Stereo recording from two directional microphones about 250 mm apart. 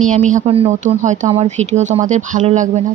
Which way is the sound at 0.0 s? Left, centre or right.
Right.